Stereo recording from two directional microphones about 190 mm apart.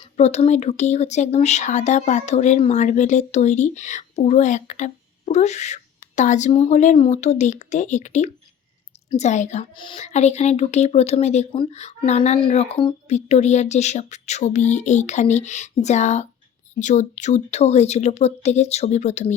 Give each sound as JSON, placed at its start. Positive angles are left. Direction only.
{"t": 0.2, "sound": "speech", "side_deg": 35}
{"t": 9.7, "sound": "speech", "side_deg": 25}